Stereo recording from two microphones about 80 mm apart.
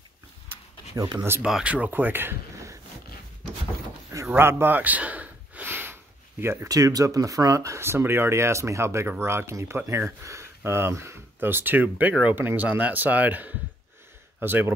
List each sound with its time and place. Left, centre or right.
1.0 s speech: right
1.4 s speech: centre
4.4 s a sound: right
6.4 s speech: right